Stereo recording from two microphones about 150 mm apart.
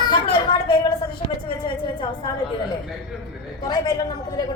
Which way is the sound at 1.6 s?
30° left (ahead or behind).